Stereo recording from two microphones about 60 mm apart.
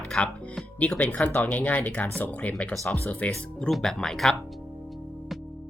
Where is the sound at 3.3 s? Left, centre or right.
Centre.